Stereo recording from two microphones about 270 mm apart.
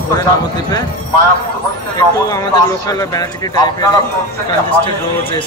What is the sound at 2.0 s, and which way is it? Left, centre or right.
Speech, centre.